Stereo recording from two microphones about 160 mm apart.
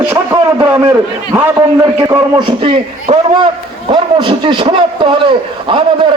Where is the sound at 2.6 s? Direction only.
35° right (ahead or behind).